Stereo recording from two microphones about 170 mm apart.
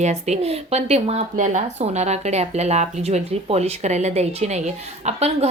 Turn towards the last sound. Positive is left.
turn(degrees=-40)  # may be behind; listen again after turning